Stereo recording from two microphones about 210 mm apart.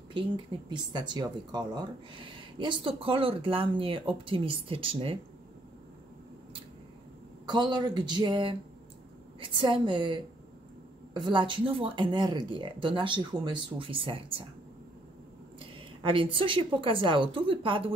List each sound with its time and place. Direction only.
0.1 s speech: 20° right (ahead or behind)
7.4 s speech: 20° right (ahead or behind)
15.6 s speech: 25° right (ahead or behind)